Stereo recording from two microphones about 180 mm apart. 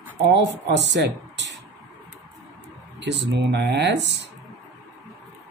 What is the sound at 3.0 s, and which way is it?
Speech, 80° right.